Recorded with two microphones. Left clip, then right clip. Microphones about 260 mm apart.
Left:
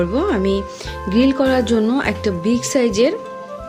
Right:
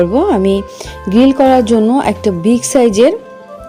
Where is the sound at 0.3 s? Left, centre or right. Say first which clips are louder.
Right 6 dB; right.